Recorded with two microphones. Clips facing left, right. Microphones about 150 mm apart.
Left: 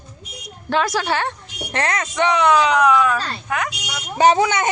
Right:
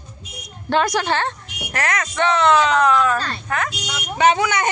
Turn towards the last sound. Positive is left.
turn(degrees=35)  # may be behind; listen again after turning